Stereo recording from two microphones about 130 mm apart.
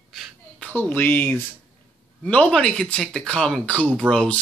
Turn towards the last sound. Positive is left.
turn(degrees=5)  # may be behind; listen again after turning